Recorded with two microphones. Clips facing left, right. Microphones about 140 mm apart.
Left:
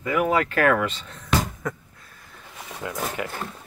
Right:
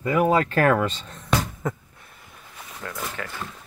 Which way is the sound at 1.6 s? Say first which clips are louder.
Right 2 dB; 25° right (ahead or behind).